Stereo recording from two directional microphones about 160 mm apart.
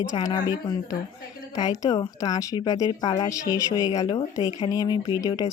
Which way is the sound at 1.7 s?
20° left (ahead or behind).